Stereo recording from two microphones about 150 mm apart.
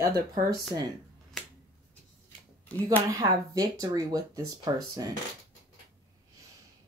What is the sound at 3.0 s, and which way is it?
A woman's voice, 25° right (ahead or behind).